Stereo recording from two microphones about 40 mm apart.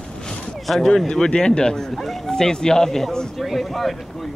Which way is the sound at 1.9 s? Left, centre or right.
Centre.